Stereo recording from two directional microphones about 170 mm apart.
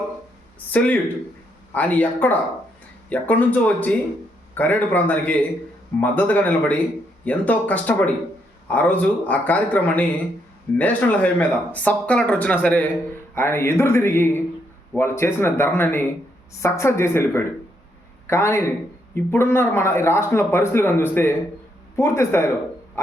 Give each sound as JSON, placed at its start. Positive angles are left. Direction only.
{"t": 0.7, "sound": "speech", "side_deg": 10}